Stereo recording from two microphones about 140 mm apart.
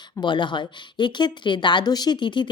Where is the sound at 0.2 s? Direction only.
35° left (ahead or behind).